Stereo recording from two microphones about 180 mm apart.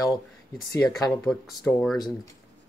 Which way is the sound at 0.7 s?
20° left (ahead or behind).